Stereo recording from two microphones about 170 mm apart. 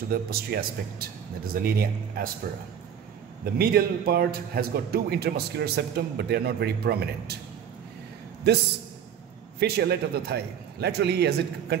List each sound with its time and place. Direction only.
0.1 s a man's voice: 65° right (ahead or behind)
3.5 s a man's voice: 60° right (ahead or behind)
9.6 s a man's voice: 70° right (ahead or behind)